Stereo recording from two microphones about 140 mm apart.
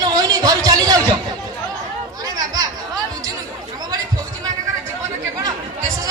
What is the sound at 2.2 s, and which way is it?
Chatter, 30° right (ahead or behind).